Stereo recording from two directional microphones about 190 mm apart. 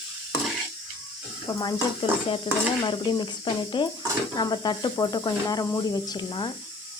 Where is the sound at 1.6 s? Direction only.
25° left (ahead or behind).